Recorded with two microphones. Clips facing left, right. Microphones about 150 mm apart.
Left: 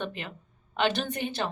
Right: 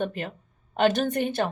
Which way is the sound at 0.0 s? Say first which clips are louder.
Right 6 dB; 45° right (ahead or behind).